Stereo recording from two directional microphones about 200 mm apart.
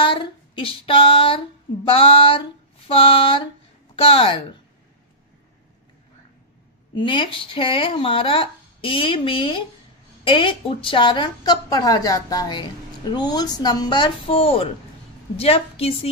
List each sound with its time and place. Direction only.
0.0 s female singing: 25° left (ahead or behind)
1.9 s speech: 30° left (ahead or behind)
7.0 s speech: 25° left (ahead or behind)